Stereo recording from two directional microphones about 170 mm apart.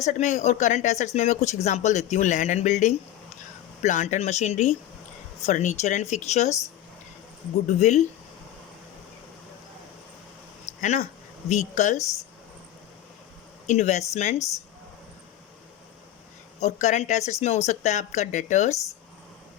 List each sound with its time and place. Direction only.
0.0 s speech: 45° left (ahead or behind)
7.7 s speech: 45° left (ahead or behind)
10.8 s speech: 45° left (ahead or behind)
13.7 s speech: 45° left (ahead or behind)
14.3 s speech: 20° left (ahead or behind)
16.6 s speech: 45° left (ahead or behind)